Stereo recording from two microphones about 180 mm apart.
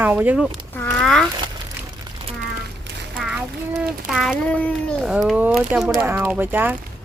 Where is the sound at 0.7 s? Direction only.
10° left (ahead or behind).